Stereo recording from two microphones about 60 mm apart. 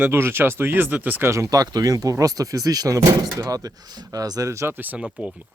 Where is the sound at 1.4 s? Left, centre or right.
Right.